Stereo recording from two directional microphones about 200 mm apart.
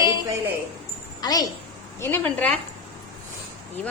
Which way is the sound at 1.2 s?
20° left (ahead or behind).